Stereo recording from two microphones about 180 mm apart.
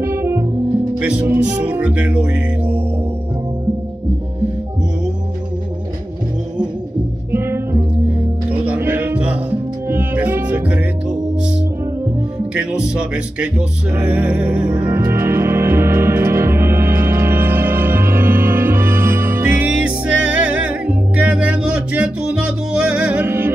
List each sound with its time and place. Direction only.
0.0 s music: 15° right (ahead or behind)
1.0 s speech: 10° right (ahead or behind)
7.3 s music: 15° right (ahead or behind)
12.5 s music: 5° right (ahead or behind)